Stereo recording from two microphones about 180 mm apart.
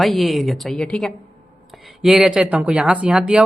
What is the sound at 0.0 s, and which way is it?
A man's voice, centre (ahead or behind).